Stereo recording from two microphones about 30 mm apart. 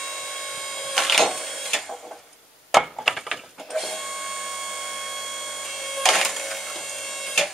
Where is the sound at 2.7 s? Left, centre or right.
Centre.